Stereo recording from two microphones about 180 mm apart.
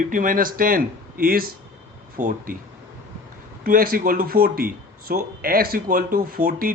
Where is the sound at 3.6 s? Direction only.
55° right (ahead or behind).